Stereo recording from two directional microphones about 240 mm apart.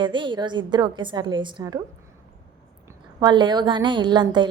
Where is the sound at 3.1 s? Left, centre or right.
Centre.